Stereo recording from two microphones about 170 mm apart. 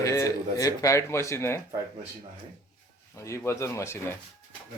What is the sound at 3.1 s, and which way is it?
Speech, 15° left (ahead or behind).